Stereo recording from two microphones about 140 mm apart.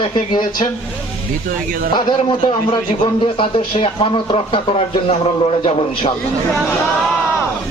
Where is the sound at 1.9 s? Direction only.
35° left (ahead or behind).